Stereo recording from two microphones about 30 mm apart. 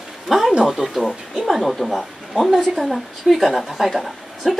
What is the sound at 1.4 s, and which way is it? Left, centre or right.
A woman's voice, centre.